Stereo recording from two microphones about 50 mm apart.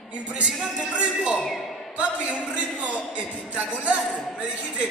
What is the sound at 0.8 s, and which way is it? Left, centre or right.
Speech, right.